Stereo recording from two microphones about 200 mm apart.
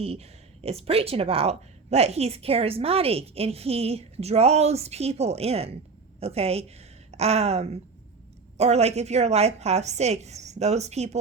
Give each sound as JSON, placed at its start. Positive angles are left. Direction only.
{"t": 0.0, "sound": "speech", "side_deg": -30}